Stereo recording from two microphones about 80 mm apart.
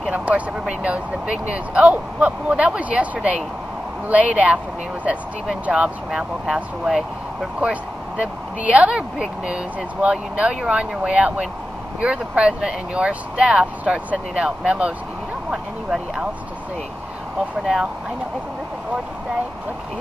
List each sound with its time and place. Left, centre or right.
0.1 s speech: centre
7.6 s speech: centre